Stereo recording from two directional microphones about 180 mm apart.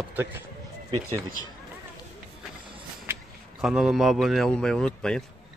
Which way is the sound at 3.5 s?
5° right (ahead or behind).